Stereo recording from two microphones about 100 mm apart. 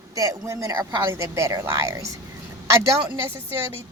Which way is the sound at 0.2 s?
30° right (ahead or behind).